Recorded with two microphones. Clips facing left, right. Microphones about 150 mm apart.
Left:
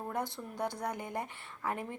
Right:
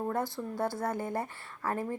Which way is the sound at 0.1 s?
20° left (ahead or behind).